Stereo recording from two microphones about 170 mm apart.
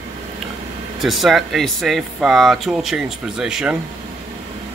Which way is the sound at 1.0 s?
Centre (ahead or behind).